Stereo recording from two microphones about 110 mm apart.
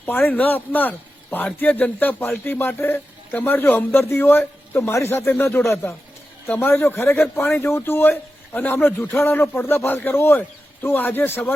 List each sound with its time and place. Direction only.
0.0 s a man's voice: 15° left (ahead or behind)